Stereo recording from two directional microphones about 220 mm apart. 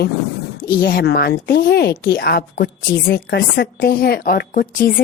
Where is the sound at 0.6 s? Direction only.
45° left (ahead or behind).